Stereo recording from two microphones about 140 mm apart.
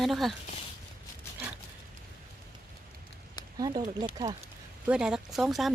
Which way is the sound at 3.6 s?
30° right (ahead or behind).